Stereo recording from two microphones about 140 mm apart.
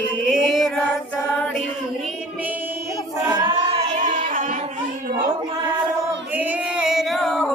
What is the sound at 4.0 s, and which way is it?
Music, 65° right (ahead or behind).